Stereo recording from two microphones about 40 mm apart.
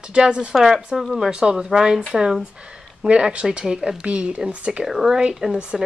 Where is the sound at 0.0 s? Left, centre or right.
Right.